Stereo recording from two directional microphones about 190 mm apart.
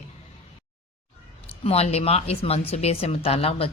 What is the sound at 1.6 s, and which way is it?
Speech, 35° left (ahead or behind).